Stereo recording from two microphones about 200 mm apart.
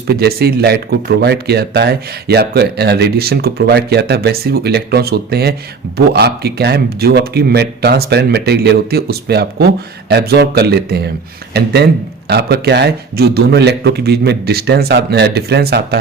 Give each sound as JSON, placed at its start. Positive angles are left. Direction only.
{"t": 0.1, "sound": "speech", "side_deg": -50}